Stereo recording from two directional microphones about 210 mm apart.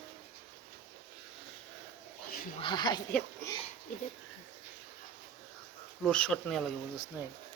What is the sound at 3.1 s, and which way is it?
Speech, 5° left (ahead or behind).